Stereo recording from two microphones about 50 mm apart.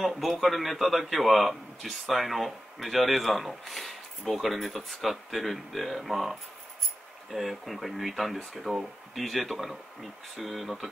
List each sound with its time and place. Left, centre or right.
0.0 s a man's voice: centre